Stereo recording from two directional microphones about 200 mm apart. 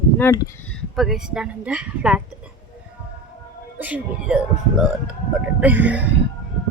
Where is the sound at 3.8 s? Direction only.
5° right (ahead or behind).